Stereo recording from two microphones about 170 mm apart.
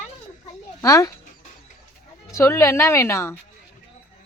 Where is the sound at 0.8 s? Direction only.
20° left (ahead or behind).